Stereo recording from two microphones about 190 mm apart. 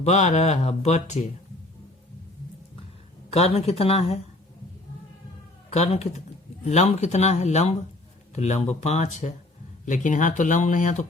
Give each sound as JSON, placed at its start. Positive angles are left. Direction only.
{"t": 0.0, "sound": "speech", "side_deg": 35}
{"t": 3.2, "sound": "speech", "side_deg": 30}
{"t": 5.7, "sound": "speech", "side_deg": 35}